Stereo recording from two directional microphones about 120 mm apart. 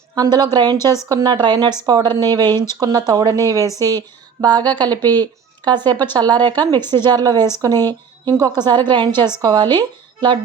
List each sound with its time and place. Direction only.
0.1 s speech: 35° right (ahead or behind)
3.8 s a sound: 35° right (ahead or behind)
4.8 s a woman's voice: 35° right (ahead or behind)